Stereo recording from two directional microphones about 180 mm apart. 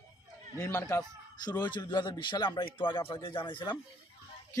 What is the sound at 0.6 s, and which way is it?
A man's voice, 15° left (ahead or behind).